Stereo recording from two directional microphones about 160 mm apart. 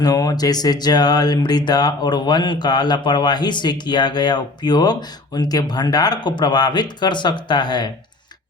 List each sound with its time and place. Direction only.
0.0 s speech: 25° left (ahead or behind)